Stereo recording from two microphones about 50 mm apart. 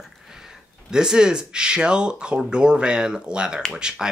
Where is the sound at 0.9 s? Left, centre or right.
Centre.